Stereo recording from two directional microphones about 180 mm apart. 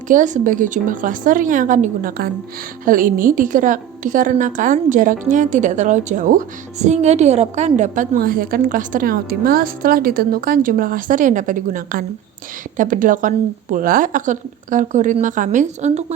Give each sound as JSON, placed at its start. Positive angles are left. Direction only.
{"t": 0.1, "sound": "a woman's voice", "side_deg": -45}